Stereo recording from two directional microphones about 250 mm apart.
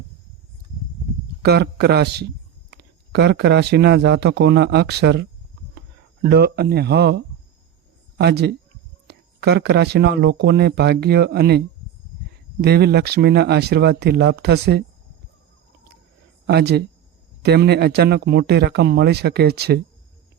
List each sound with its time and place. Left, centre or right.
1.4 s speech: right
8.2 s speech: right
12.6 s speech: right
16.5 s speech: right